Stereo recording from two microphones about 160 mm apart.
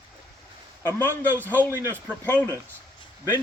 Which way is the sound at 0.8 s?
10° left (ahead or behind).